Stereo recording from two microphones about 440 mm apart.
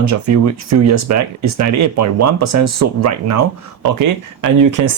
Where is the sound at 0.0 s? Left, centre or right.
Right.